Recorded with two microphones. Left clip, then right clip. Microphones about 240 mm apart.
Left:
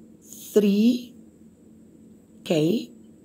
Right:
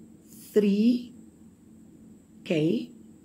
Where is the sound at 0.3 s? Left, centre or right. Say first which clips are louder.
Left 3 dB; centre.